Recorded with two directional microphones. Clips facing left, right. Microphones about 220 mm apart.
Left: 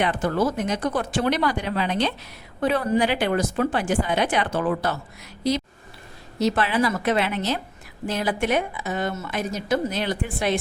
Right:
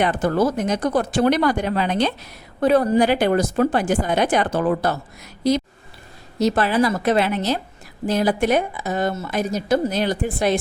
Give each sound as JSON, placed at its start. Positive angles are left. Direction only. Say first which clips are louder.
{"t": 0.0, "sound": "a woman's voice", "louder": "right 3 dB", "side_deg": -40}